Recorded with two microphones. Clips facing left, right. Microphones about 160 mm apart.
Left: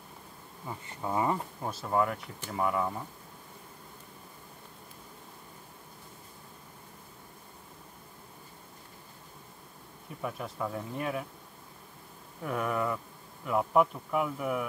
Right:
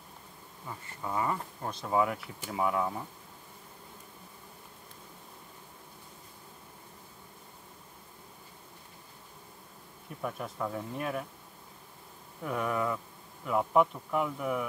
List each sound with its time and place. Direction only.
0.7 s bee: 20° left (ahead or behind)
1.6 s speech: 5° left (ahead or behind)
10.0 s speech: centre (ahead or behind)
12.4 s speech: centre (ahead or behind)